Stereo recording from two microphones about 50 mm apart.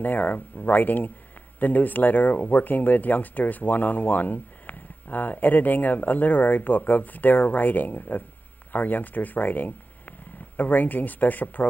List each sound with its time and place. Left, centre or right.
0.0 s speech: left